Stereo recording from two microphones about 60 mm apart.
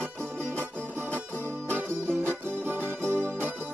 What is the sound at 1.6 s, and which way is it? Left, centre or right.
Music, right.